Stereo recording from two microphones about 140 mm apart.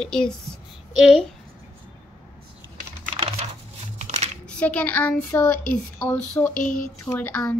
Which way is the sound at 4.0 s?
55° right (ahead or behind).